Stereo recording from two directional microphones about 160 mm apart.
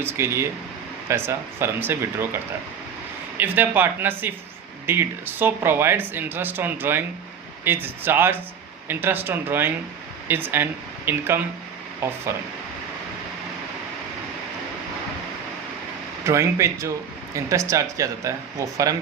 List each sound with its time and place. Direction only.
0.0 s speech: 15° right (ahead or behind)
3.3 s speech: 10° right (ahead or behind)
16.2 s speech: 15° right (ahead or behind)